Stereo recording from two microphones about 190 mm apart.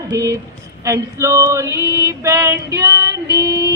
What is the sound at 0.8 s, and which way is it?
Female singing, 15° right (ahead or behind).